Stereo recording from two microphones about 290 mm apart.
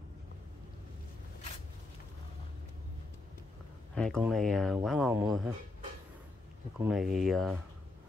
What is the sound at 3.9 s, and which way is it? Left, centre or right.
Speech, centre.